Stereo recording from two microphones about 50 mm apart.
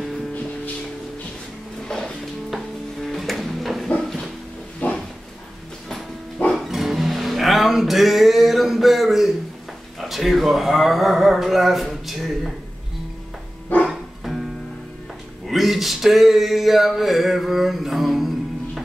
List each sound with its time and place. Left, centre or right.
1.9 s music: centre
4.8 s dog: left
6.5 s music: centre
9.9 s a sound: centre
13.8 s music: centre
15.4 s a sound: centre